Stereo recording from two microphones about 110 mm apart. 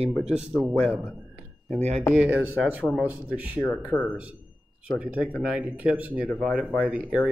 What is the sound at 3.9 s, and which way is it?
Speech, 25° left (ahead or behind).